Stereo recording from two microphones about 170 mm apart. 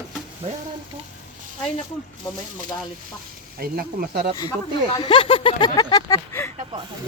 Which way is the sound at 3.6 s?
60° right (ahead or behind).